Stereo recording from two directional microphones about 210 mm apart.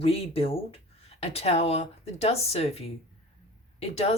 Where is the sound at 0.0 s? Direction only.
25° left (ahead or behind).